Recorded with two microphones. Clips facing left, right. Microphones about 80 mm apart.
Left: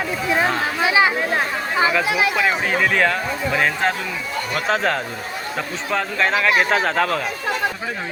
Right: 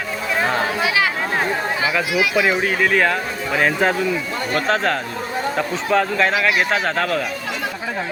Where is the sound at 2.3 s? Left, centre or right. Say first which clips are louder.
Right 2 dB; centre.